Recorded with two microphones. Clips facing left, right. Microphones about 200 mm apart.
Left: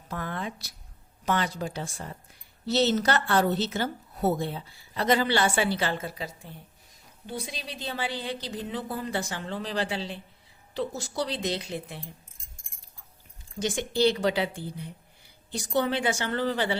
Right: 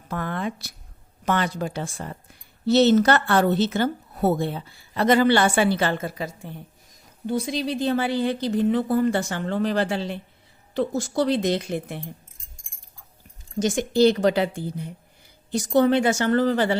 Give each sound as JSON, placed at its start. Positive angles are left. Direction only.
{"t": 0.1, "sound": "a woman's voice", "side_deg": -60}
{"t": 13.6, "sound": "a woman's voice", "side_deg": -45}